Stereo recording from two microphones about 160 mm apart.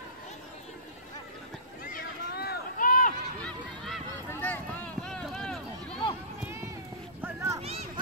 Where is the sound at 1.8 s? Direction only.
70° left (ahead or behind).